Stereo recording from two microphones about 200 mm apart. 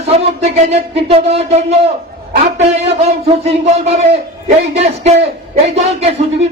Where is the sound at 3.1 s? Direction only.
35° right (ahead or behind).